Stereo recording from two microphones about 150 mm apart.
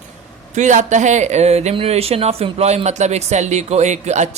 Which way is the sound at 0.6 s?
55° right (ahead or behind).